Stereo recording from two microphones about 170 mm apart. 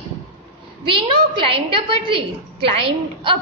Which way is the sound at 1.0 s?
30° right (ahead or behind).